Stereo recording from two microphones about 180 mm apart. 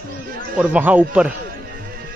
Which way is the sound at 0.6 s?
10° right (ahead or behind).